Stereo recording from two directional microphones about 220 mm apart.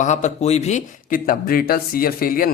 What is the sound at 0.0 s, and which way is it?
A man's voice, 35° left (ahead or behind).